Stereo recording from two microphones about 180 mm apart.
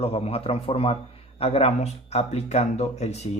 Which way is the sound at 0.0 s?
35° left (ahead or behind).